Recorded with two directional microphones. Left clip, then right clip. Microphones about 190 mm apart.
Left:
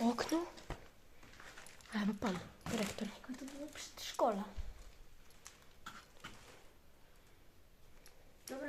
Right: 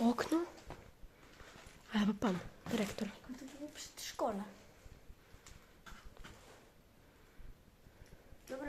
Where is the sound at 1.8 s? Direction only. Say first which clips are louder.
Right 3 dB; 30° right (ahead or behind).